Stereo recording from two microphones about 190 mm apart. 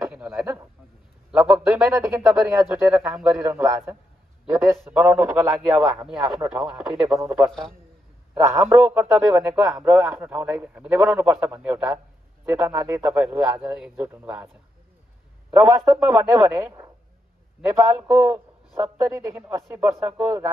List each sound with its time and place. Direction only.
0.0 s a sound: 10° right (ahead or behind)
1.3 s a man's voice: 5° right (ahead or behind)
15.7 s speech: 10° right (ahead or behind)